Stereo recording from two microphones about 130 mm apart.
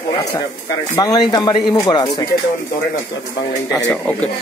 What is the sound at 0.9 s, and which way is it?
Speech, 30° left (ahead or behind).